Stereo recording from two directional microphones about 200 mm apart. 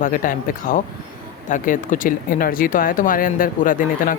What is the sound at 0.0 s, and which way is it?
Speech, 40° left (ahead or behind).